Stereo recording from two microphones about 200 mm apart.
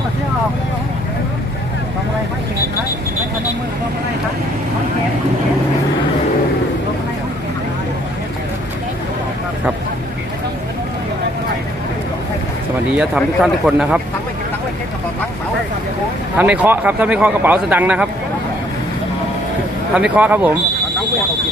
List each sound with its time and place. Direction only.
13.0 s speech: 5° right (ahead or behind)
16.4 s speech: 10° right (ahead or behind)
20.0 s speech: 5° right (ahead or behind)